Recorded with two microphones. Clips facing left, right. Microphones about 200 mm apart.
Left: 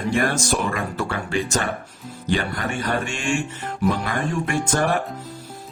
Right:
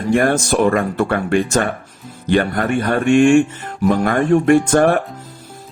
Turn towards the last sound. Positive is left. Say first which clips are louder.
# right 9 dB
turn(degrees=-55)  # may be behind; listen again after turning